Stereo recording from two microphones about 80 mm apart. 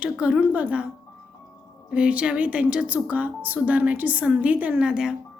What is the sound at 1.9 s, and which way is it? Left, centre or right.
A woman's voice, centre.